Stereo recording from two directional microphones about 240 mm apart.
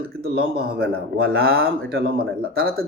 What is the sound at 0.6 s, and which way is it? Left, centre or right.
Speech, right.